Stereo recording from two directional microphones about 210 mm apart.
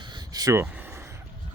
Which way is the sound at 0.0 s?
20° right (ahead or behind).